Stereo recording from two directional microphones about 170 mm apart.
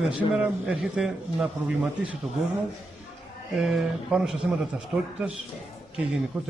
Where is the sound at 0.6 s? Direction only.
5° right (ahead or behind).